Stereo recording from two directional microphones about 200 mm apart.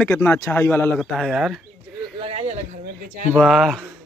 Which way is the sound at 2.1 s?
30° right (ahead or behind).